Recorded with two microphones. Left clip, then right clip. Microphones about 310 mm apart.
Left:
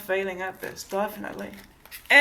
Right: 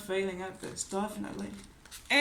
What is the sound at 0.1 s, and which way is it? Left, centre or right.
Speech, centre.